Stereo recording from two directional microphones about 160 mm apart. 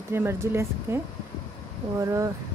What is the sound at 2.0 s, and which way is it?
Speech, 20° right (ahead or behind).